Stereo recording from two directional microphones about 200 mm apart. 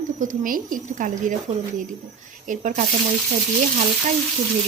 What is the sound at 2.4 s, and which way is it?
Speech, 40° right (ahead or behind).